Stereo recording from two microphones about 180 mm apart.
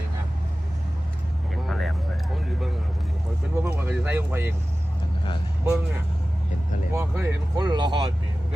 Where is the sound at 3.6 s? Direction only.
10° right (ahead or behind).